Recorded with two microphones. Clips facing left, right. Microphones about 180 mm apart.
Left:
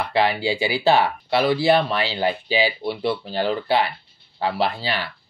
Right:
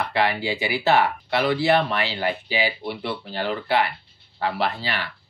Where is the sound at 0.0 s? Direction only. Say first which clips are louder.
Left 3 dB; 30° left (ahead or behind).